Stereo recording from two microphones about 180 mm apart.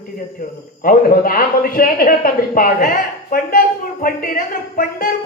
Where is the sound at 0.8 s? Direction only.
50° left (ahead or behind).